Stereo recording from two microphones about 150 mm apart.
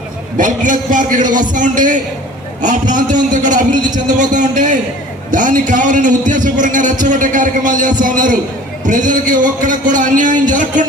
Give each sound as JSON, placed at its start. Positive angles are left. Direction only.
{"t": 0.3, "sound": "a man's voice", "side_deg": -60}